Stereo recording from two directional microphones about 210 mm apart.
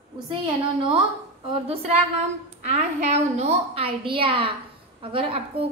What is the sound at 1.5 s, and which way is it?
A woman's voice, 25° right (ahead or behind).